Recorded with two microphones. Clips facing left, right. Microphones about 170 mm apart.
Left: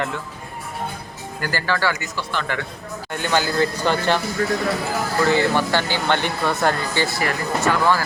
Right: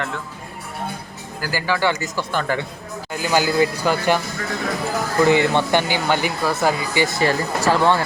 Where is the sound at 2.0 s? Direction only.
45° right (ahead or behind).